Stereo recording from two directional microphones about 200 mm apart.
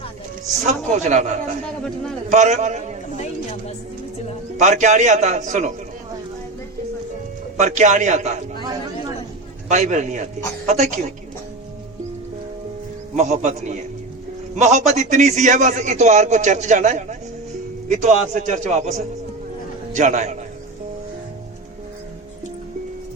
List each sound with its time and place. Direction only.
0.6 s a man's voice: 35° right (ahead or behind)
2.3 s a man's voice: 35° right (ahead or behind)
4.6 s a man's voice: 35° right (ahead or behind)
7.6 s a man's voice: 35° right (ahead or behind)
9.6 s a man's voice: 35° right (ahead or behind)
13.1 s a man's voice: 35° right (ahead or behind)